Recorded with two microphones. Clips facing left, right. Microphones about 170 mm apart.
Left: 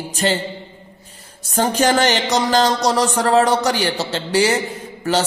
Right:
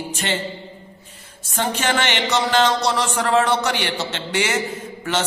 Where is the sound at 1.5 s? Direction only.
40° left (ahead or behind).